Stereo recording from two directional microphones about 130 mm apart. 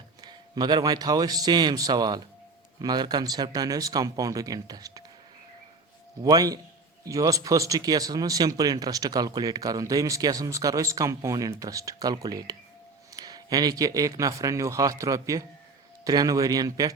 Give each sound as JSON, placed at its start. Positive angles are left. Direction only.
{"t": 0.2, "sound": "a man's voice", "side_deg": -30}
{"t": 6.2, "sound": "speech", "side_deg": -30}